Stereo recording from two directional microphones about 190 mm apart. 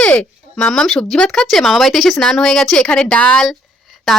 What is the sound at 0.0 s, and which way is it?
Speech, 5° left (ahead or behind).